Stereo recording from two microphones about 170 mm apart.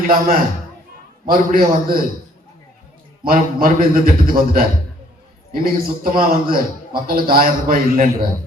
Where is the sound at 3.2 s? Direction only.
55° right (ahead or behind).